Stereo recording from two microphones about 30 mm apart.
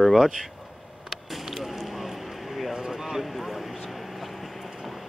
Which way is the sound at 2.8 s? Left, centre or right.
Centre.